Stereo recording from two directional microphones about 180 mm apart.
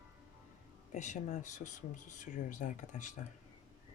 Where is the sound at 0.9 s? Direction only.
40° left (ahead or behind).